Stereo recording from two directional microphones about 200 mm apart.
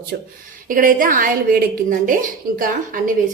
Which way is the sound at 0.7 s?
45° right (ahead or behind).